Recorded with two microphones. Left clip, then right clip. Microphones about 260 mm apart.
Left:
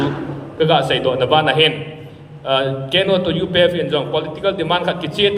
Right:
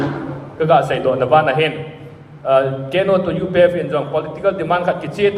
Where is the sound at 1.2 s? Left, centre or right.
Centre.